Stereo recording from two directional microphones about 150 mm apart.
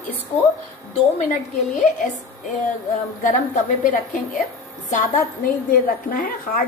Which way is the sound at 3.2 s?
60° left (ahead or behind).